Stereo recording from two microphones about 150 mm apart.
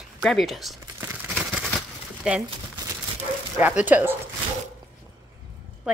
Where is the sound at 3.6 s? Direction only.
10° right (ahead or behind).